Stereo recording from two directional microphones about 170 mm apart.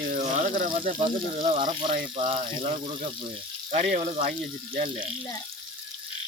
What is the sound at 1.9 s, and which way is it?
Speech, 50° right (ahead or behind).